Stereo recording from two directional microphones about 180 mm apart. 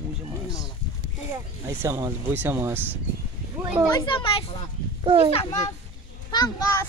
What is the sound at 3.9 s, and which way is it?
Speech, 25° left (ahead or behind).